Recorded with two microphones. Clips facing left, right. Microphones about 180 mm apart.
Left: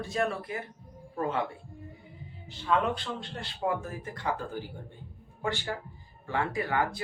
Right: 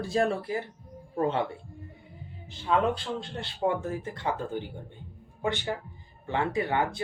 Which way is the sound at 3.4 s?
25° right (ahead or behind).